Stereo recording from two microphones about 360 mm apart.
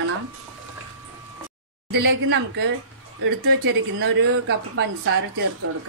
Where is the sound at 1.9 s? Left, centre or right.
Right.